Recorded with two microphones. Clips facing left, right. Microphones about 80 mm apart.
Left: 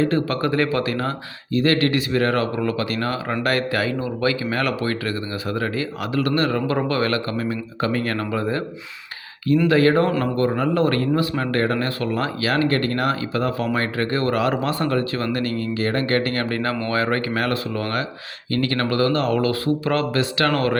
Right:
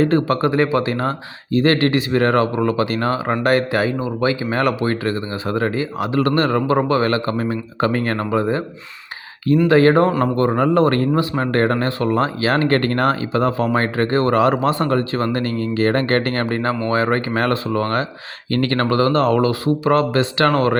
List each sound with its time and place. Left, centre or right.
0.0 s speech: right
9.6 s a man's voice: right
13.3 s a man's voice: right
16.5 s a man's voice: right
19.5 s speech: right